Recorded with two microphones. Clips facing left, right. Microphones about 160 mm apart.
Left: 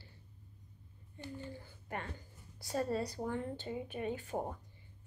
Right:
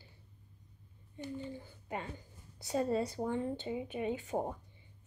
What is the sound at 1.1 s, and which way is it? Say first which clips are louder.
A woman's voice: right 4 dB; 15° right (ahead or behind).